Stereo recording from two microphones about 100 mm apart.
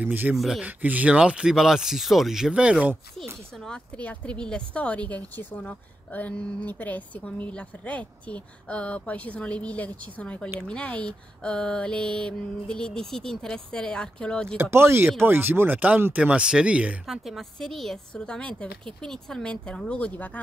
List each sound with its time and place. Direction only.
0.0 s speech: 20° right (ahead or behind)
0.4 s speech: centre (ahead or behind)
0.7 s speech: 15° right (ahead or behind)
3.6 s speech: 10° left (ahead or behind)
14.6 s speech: 25° right (ahead or behind)
17.3 s speech: 5° left (ahead or behind)